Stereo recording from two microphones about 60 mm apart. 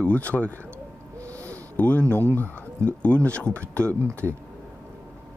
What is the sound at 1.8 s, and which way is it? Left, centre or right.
Speech, left.